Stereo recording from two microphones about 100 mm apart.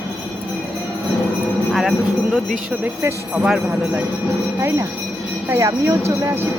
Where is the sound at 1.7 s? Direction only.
Centre (ahead or behind).